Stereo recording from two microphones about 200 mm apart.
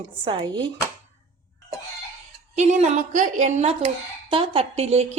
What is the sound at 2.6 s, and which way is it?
A woman's voice, 35° right (ahead or behind).